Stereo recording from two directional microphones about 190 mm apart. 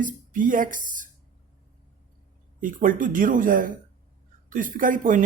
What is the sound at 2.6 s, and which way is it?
Speech, 45° right (ahead or behind).